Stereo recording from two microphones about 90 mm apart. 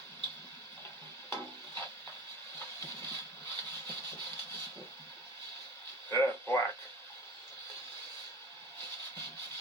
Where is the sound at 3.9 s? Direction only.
25° left (ahead or behind).